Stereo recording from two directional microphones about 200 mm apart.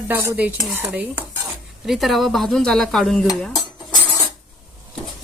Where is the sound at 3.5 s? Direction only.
20° left (ahead or behind).